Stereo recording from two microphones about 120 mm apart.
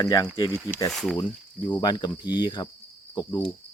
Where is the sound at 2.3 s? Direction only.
40° left (ahead or behind).